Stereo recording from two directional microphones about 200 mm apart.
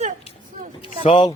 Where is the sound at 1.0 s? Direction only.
25° left (ahead or behind).